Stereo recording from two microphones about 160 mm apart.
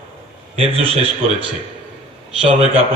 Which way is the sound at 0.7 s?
35° right (ahead or behind).